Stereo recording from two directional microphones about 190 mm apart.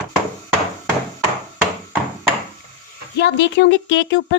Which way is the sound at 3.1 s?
65° left (ahead or behind).